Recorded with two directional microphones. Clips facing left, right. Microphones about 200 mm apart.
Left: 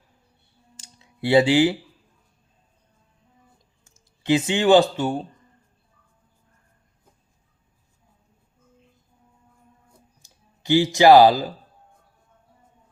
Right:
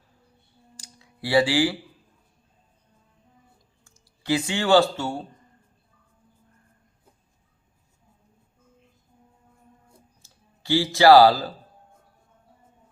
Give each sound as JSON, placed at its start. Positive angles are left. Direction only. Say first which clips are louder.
{"t": 0.8, "sound": "a sound", "louder": "left 6 dB", "side_deg": 25}
{"t": 3.8, "sound": "speech", "louder": "left 4 dB", "side_deg": 20}
{"t": 10.2, "sound": "music", "louder": "left 4 dB", "side_deg": 20}
{"t": 10.9, "sound": "speech", "louder": "left 1 dB", "side_deg": 20}